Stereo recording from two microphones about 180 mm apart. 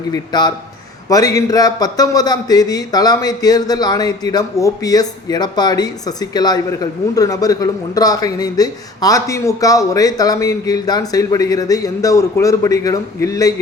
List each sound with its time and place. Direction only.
0.1 s speech: 25° left (ahead or behind)